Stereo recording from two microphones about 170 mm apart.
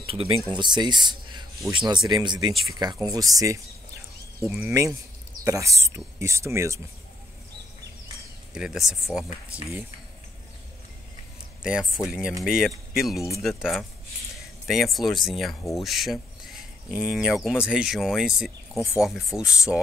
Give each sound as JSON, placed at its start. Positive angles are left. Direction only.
{"t": 0.0, "sound": "speech", "side_deg": -35}
{"t": 8.5, "sound": "speech", "side_deg": 0}
{"t": 11.6, "sound": "speech", "side_deg": -5}